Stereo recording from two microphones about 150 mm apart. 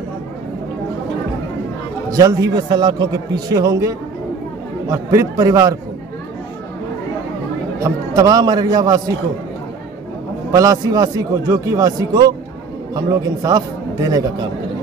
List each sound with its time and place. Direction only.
2.0 s speech: 25° right (ahead or behind)
7.8 s speech: 25° right (ahead or behind)
10.5 s speech: 25° right (ahead or behind)